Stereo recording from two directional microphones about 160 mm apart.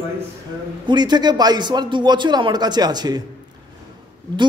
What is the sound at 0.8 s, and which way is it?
A man's voice, 25° right (ahead or behind).